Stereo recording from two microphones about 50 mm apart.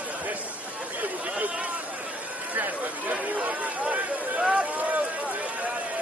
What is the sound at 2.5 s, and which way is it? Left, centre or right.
Chatter, right.